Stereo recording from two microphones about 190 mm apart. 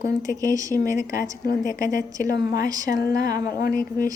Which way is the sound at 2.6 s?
20° right (ahead or behind).